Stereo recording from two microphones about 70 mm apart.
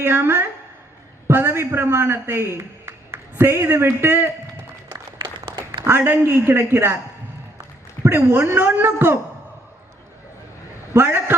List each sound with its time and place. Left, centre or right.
0.0 s a woman's voice: right
5.8 s a woman's voice: right
8.0 s a woman's voice: right
10.9 s a woman's voice: right